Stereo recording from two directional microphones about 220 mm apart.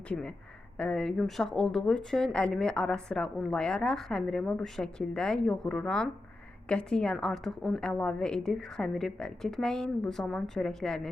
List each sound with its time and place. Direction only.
0.1 s a woman's voice: 5° left (ahead or behind)